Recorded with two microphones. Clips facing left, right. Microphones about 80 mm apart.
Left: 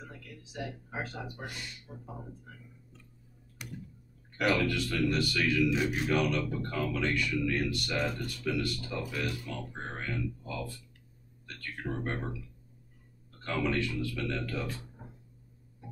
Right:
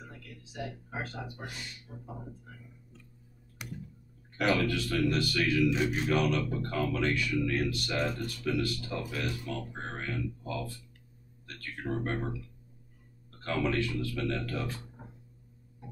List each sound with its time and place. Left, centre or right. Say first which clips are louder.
0.9 s speech: left 1 dB; centre
1.9 s speech: even; left
3.6 s tick-tock: right 1 dB; centre
4.4 s speech: even; centre
11.7 s speech: right 2 dB; centre
13.6 s speech: even; centre